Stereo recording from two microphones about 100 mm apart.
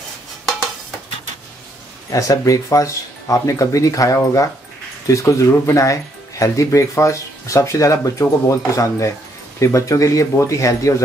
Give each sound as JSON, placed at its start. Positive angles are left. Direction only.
{"t": 2.0, "sound": "speech", "side_deg": 35}